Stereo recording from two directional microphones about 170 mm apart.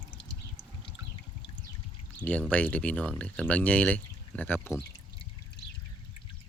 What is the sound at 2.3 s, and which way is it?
Speech, 10° left (ahead or behind).